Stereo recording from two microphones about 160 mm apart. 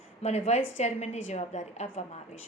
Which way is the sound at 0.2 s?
45° left (ahead or behind).